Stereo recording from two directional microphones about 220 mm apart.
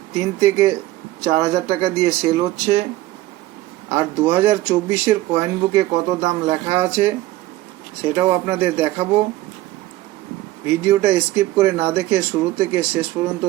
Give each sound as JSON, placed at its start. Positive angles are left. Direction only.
{"t": 0.2, "sound": "speech", "side_deg": -10}
{"t": 3.8, "sound": "speech", "side_deg": -10}
{"t": 10.7, "sound": "speech", "side_deg": -10}